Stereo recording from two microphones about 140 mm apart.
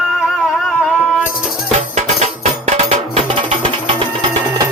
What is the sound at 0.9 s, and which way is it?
Music, 5° right (ahead or behind).